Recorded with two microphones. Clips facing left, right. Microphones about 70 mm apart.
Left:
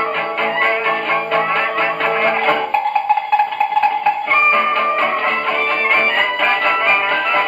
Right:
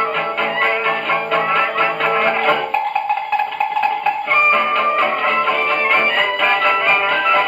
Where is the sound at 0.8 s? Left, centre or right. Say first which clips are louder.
Left 1 dB; centre.